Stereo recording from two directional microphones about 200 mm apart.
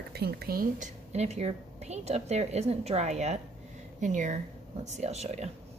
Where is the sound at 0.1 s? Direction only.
55° right (ahead or behind); by 5.5 s 35° right (ahead or behind).